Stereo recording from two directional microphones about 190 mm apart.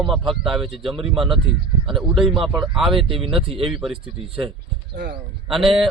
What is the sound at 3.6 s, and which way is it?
Speech, centre (ahead or behind).